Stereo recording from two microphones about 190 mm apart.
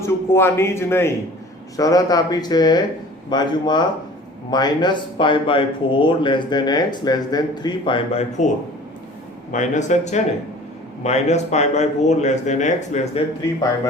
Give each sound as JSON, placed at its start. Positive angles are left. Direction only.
{"t": 0.0, "sound": "a man's voice", "side_deg": 15}
{"t": 9.5, "sound": "speech", "side_deg": 40}